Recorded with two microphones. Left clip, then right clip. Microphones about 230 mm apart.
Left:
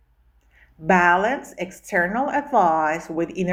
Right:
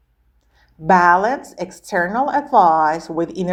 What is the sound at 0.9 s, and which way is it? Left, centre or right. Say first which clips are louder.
A woman's voice: right 4 dB; centre.